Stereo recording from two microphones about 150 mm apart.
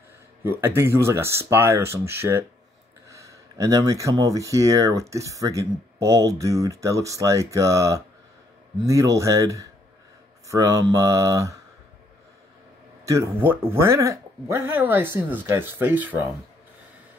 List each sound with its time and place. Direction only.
0.4 s speech: 15° right (ahead or behind)
13.0 s speech: 20° right (ahead or behind)